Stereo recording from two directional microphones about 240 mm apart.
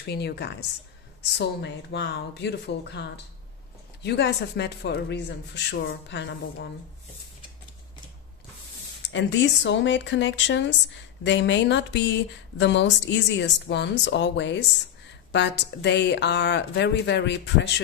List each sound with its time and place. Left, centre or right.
0.0 s speech: left
9.0 s speech: left